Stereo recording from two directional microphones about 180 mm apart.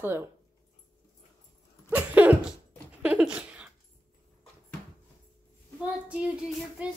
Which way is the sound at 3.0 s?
5° right (ahead or behind).